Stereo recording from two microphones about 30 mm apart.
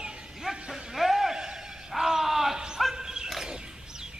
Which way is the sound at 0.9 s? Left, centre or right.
Centre.